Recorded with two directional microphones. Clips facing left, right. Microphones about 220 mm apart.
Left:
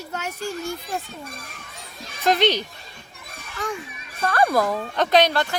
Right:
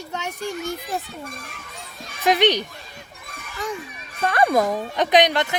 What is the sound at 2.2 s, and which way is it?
Speech, 15° right (ahead or behind).